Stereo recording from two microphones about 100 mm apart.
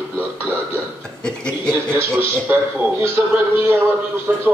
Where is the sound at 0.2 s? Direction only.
20° right (ahead or behind).